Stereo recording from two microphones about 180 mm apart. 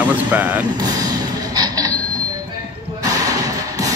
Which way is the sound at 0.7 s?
20° right (ahead or behind).